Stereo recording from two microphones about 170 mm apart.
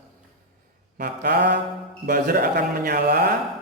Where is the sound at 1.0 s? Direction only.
65° right (ahead or behind).